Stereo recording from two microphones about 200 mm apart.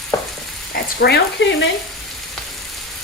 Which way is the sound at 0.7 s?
55° left (ahead or behind).